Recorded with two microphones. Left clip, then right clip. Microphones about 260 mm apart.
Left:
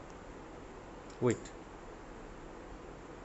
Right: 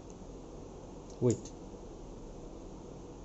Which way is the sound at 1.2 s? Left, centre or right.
Left.